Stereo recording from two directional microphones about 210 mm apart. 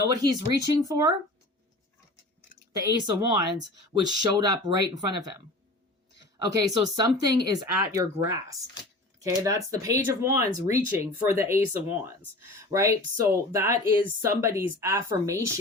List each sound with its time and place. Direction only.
0.1 s speech: 20° right (ahead or behind)
2.7 s speech: 20° right (ahead or behind)
6.6 s speech: 15° right (ahead or behind)